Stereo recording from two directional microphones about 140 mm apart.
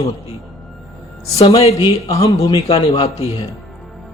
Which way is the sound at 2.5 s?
40° left (ahead or behind).